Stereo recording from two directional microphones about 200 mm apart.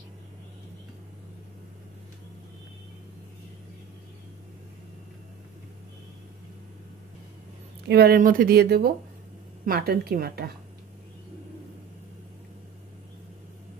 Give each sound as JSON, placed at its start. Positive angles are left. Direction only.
{"t": 7.9, "sound": "speech", "side_deg": -50}